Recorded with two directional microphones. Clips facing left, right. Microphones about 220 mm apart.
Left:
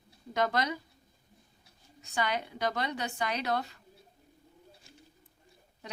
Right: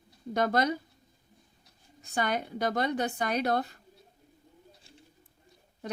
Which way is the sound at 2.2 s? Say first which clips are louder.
Right 2 dB; 50° right (ahead or behind).